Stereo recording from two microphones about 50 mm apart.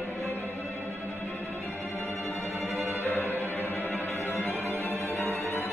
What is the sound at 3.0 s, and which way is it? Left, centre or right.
Music, left.